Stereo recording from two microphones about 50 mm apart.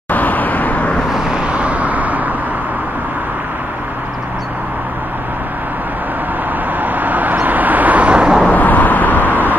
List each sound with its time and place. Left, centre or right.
0.1 s vehicle: left
1.3 s vehicle: right
6.8 s vehicle: right
8.5 s vehicle: left